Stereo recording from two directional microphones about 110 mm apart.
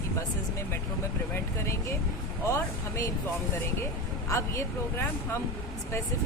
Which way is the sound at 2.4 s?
25° left (ahead or behind).